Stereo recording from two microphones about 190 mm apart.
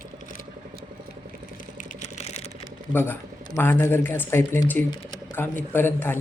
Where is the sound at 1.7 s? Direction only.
35° left (ahead or behind).